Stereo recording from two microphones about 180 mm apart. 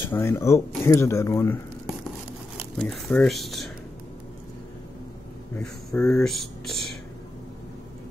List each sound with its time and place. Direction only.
0.1 s speech: 15° left (ahead or behind)
2.8 s speech: 5° left (ahead or behind)
5.6 s speech: 5° left (ahead or behind)